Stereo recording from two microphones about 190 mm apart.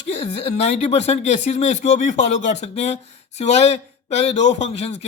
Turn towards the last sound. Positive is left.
turn(degrees=35)  # may be behind; listen again after turning